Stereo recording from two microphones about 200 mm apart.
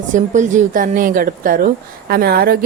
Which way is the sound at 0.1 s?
40° right (ahead or behind).